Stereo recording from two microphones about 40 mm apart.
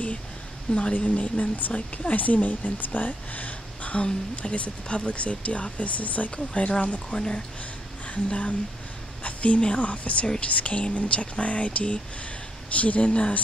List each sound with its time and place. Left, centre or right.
0.9 s speech: left
6.3 s speech: left
7.1 s speech: left
8.1 s speech: left